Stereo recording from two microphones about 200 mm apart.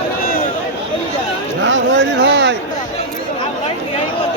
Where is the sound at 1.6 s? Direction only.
65° right (ahead or behind).